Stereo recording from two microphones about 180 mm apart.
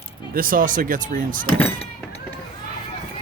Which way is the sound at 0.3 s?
50° right (ahead or behind).